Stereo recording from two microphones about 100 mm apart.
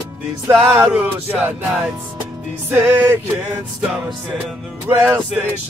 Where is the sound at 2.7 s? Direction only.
20° right (ahead or behind).